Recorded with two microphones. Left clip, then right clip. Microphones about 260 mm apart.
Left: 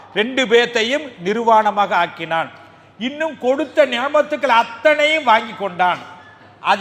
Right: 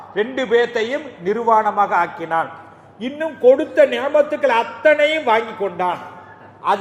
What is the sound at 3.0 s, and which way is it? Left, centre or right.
A man's voice, left.